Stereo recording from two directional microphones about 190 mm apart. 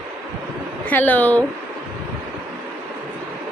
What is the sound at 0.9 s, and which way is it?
Speech, 10° left (ahead or behind).